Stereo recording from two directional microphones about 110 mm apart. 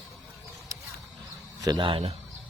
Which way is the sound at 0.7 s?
30° right (ahead or behind).